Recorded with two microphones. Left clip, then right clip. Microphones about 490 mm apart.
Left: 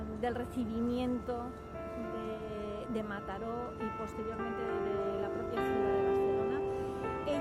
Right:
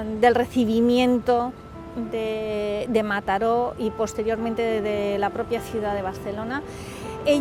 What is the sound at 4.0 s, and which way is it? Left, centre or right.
Speech, right.